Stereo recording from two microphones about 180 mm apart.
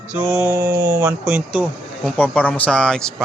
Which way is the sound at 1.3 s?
5° right (ahead or behind).